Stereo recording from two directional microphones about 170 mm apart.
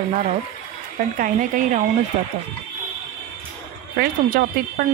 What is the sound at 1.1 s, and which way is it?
Speech, 55° right (ahead or behind).